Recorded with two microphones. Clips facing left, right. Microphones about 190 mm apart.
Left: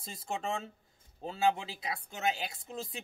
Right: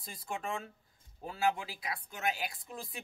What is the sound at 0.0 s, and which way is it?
Speech, 25° left (ahead or behind).